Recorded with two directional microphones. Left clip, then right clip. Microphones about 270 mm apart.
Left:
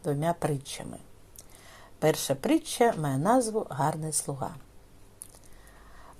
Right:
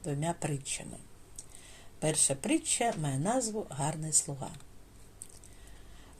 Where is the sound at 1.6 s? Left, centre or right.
Centre.